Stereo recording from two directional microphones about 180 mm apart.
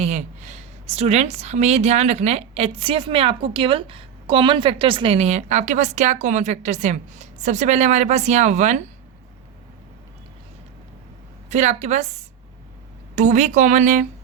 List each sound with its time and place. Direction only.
0.0 s a woman's voice: 40° right (ahead or behind)
11.4 s a woman's voice: 40° right (ahead or behind)